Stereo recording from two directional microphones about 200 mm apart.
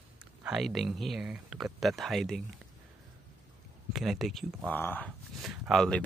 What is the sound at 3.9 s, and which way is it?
Speech, centre (ahead or behind).